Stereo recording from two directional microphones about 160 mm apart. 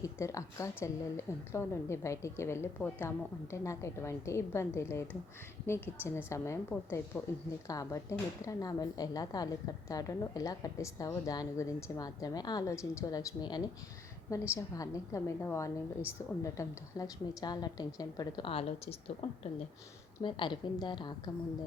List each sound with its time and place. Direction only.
0.2 s a woman's voice: 20° left (ahead or behind)